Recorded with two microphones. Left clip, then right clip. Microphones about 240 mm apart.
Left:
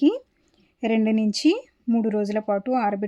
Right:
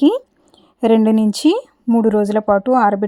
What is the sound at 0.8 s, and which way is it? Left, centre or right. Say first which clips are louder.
Speech: right 9 dB; right.